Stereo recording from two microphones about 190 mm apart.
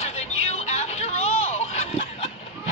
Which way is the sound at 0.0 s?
35° left (ahead or behind).